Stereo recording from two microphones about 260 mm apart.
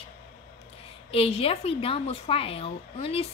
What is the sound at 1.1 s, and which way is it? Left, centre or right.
A woman's voice, left.